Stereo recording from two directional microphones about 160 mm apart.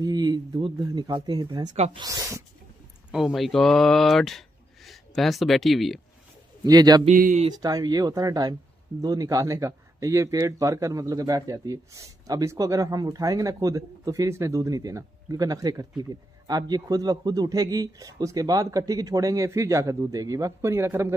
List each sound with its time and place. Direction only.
0.0 s speech: 25° right (ahead or behind)
3.1 s speech: centre (ahead or behind)
6.6 s speech: 25° right (ahead or behind)
7.1 s speech: 55° right (ahead or behind)
7.4 s speech: 25° right (ahead or behind)